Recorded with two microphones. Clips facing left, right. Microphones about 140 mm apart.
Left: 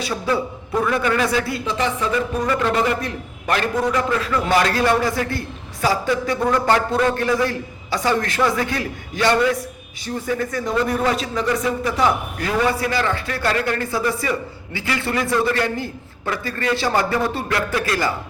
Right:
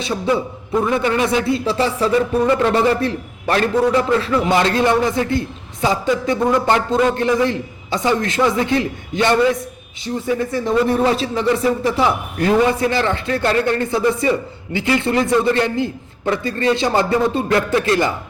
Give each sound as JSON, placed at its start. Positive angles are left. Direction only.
{"t": 0.0, "sound": "a man's voice", "side_deg": -20}